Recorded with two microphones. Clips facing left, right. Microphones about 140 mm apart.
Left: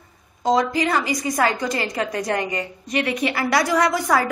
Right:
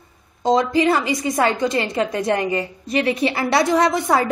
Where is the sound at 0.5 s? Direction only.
25° right (ahead or behind).